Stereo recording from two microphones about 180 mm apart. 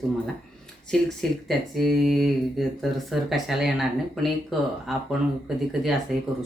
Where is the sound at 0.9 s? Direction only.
Centre (ahead or behind).